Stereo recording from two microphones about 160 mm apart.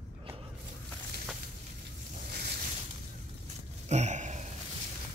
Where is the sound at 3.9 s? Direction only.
45° right (ahead or behind).